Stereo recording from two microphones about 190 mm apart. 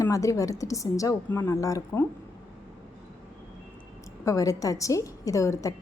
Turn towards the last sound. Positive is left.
turn(degrees=15)  # may be behind; listen again after turning